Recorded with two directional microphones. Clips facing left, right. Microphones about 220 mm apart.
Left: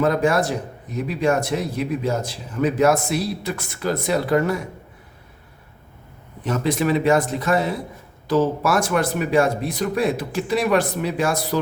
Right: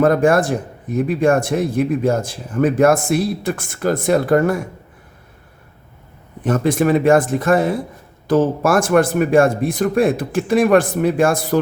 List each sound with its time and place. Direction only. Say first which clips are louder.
0.0 s speech: right 5 dB; 50° right (ahead or behind)
6.4 s speech: right 5 dB; 50° right (ahead or behind)